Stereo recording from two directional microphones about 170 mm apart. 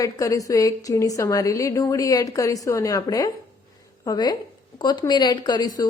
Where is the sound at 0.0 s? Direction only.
20° left (ahead or behind).